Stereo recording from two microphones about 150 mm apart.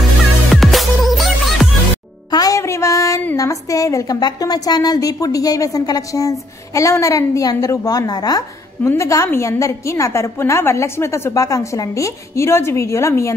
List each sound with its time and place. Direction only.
0.5 s music: centre (ahead or behind)
2.3 s a woman's voice: 25° left (ahead or behind)